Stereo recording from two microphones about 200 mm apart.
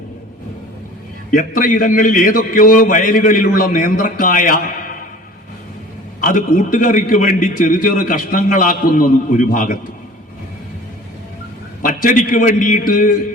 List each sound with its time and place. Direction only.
1.3 s a man's voice: 40° left (ahead or behind)
6.1 s a man's voice: 45° left (ahead or behind)
11.8 s a man's voice: 40° left (ahead or behind)